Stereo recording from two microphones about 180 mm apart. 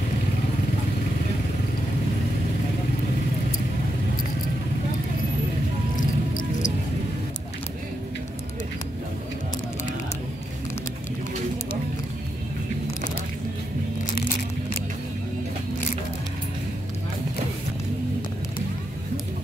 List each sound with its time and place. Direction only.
5.9 s music: 45° left (ahead or behind)